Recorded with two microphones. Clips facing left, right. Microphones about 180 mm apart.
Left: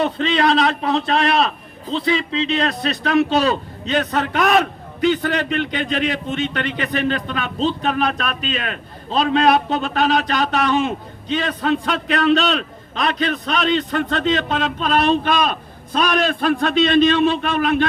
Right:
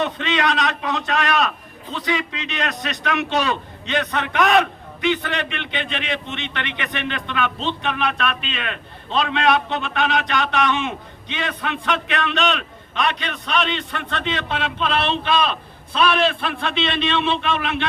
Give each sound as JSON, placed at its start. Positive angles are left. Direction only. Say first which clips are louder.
{"t": 0.0, "sound": "a man's voice", "louder": "left 4 dB", "side_deg": 35}